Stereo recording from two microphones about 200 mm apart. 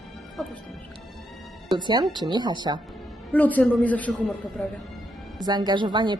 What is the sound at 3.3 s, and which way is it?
A man's voice, 10° left (ahead or behind).